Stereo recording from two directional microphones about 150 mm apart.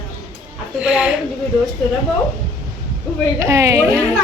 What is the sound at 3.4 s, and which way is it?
Speech, 20° right (ahead or behind).